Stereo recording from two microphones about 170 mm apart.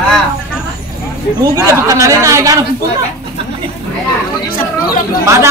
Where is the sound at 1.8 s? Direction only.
20° right (ahead or behind).